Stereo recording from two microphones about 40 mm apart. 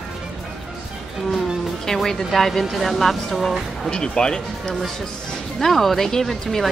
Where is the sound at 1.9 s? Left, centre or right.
Centre.